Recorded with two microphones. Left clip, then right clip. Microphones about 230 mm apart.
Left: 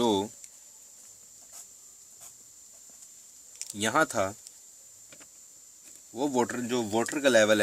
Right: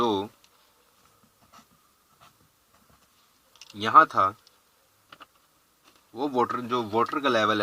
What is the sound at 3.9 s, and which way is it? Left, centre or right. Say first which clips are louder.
Speech: right 10 dB; left.